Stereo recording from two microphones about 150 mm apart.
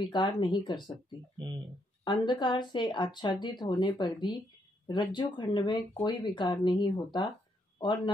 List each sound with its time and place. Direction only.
0.0 s speech: 30° left (ahead or behind)
2.2 s speech: 30° left (ahead or behind)